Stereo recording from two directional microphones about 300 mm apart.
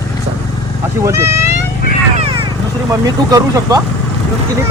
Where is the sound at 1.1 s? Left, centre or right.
Centre.